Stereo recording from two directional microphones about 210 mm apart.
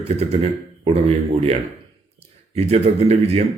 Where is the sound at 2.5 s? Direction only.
30° right (ahead or behind).